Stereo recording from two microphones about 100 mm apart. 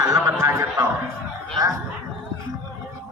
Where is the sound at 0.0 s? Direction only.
30° right (ahead or behind).